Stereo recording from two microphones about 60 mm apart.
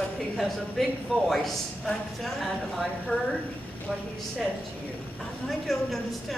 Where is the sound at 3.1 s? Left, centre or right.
Centre.